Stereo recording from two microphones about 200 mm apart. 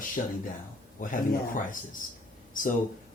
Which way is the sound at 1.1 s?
40° left (ahead or behind).